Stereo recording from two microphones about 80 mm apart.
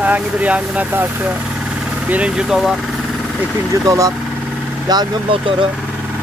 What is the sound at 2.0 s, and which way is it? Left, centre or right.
Speech, centre.